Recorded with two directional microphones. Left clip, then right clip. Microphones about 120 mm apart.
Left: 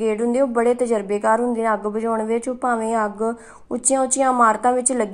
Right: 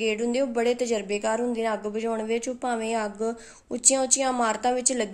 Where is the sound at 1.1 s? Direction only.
30° right (ahead or behind).